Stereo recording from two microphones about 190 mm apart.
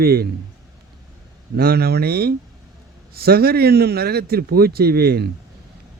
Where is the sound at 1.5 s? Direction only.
55° right (ahead or behind).